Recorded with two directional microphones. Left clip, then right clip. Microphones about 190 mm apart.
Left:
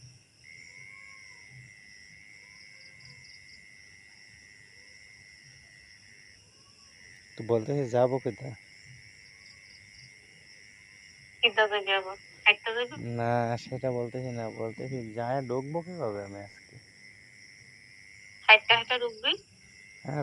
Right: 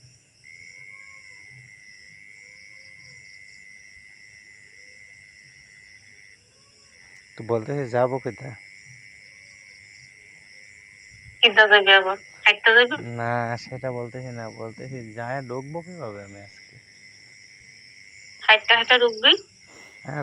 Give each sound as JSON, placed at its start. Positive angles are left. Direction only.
{"t": 7.3, "sound": "speech", "side_deg": 0}
{"t": 11.3, "sound": "a woman's voice", "side_deg": -50}
{"t": 13.1, "sound": "speech", "side_deg": 10}
{"t": 18.3, "sound": "speech", "side_deg": -45}
{"t": 20.1, "sound": "speech", "side_deg": 5}